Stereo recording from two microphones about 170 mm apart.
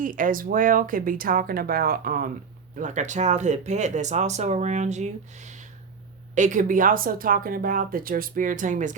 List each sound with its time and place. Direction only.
0.0 s speech: 50° right (ahead or behind)
2.7 s speech: 45° right (ahead or behind)